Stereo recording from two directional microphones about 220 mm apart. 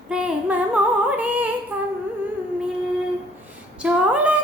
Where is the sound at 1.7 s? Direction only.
5° right (ahead or behind).